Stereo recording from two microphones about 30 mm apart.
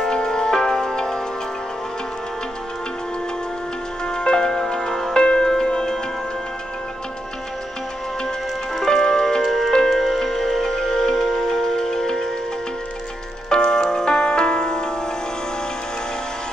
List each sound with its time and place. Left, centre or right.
0.0 s music: left
4.0 s music: left
5.1 s music: left
8.8 s tick-tock: left
9.4 s music: centre
9.7 s music: centre
9.9 s music: centre
13.5 s music: left